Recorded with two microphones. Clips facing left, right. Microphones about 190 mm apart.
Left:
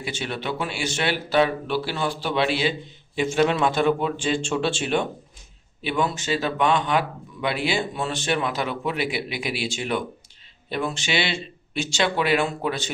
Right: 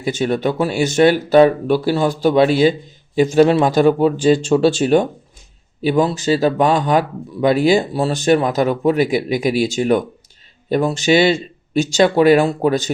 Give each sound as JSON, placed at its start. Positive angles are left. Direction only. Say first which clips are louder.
{"t": 0.0, "sound": "a man's voice", "louder": "right 11 dB", "side_deg": -40}